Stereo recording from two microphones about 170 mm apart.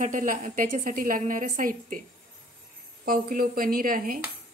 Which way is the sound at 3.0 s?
55° right (ahead or behind).